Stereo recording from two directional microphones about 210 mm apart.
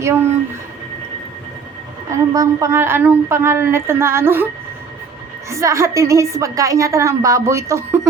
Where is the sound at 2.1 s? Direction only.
15° right (ahead or behind).